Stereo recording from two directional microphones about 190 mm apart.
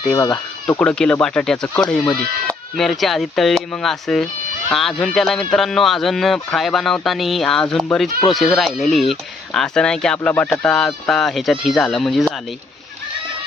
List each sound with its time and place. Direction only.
0.1 s speech: 20° left (ahead or behind)
0.8 s speech: 5° left (ahead or behind)